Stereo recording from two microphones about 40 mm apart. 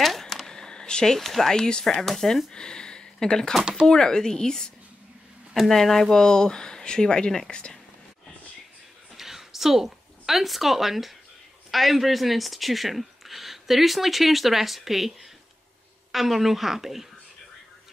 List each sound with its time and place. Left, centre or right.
0.0 s a sound: centre
0.5 s a sound: centre
1.1 s speech: centre
1.5 s speech: centre
1.9 s speech: centre
2.5 s speech: centre
6.2 s speech: centre
9.1 s a sound: centre
11.7 s speech: centre